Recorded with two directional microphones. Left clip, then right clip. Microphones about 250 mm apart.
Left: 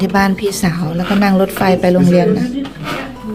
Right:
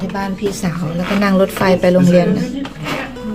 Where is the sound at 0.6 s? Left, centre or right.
Centre.